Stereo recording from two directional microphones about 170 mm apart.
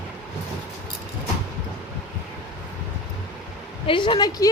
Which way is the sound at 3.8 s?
30° left (ahead or behind).